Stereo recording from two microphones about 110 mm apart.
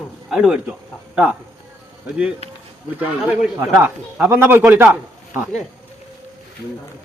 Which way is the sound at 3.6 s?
20° right (ahead or behind).